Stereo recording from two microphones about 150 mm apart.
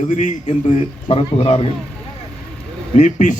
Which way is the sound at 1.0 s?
40° left (ahead or behind).